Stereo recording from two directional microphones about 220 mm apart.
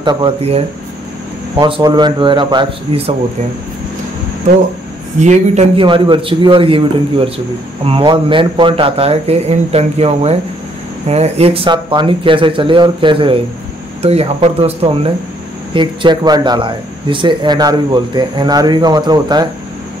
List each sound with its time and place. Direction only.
0.0 s speech: 20° right (ahead or behind)
5.2 s speech: 30° right (ahead or behind)